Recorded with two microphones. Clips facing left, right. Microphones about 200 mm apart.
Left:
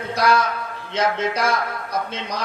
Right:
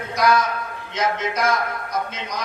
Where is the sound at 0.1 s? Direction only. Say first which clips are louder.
Even; 30° left (ahead or behind).